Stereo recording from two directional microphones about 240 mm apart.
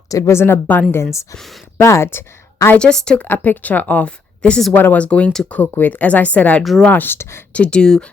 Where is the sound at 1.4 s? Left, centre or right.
Centre.